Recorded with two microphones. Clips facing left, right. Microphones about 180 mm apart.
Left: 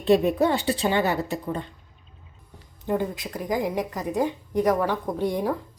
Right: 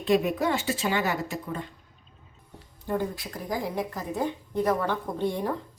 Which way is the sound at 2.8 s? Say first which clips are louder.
Left 3 dB; 20° left (ahead or behind).